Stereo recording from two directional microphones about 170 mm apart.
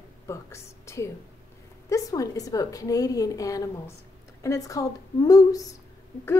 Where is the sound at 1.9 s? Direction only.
20° left (ahead or behind).